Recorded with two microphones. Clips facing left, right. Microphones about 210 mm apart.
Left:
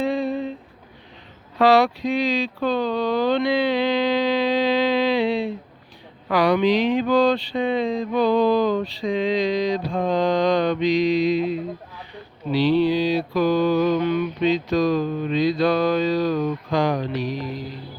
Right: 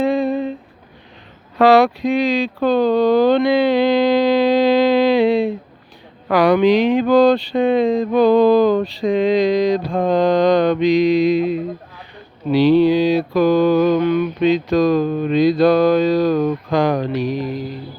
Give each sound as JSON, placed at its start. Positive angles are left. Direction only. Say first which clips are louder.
{"t": 0.0, "sound": "humming", "louder": "right 5 dB", "side_deg": -50}
{"t": 1.5, "sound": "speech", "louder": "right 5 dB", "side_deg": -50}
{"t": 12.5, "sound": "mantra", "louder": "right 6 dB", "side_deg": -50}